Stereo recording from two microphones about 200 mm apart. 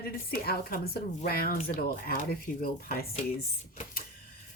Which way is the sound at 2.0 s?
45° left (ahead or behind).